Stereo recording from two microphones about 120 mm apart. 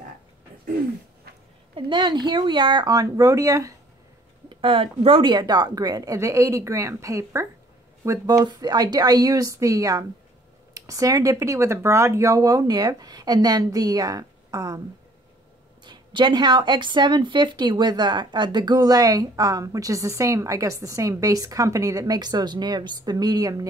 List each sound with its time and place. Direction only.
1.9 s speech: 40° right (ahead or behind)
4.5 s speech: 45° right (ahead or behind)
15.8 s speech: 40° right (ahead or behind)